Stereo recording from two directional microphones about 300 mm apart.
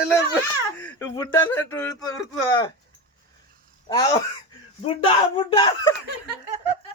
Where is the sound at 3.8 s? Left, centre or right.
Centre.